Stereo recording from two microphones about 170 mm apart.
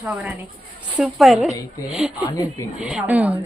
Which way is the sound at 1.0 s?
Centre (ahead or behind).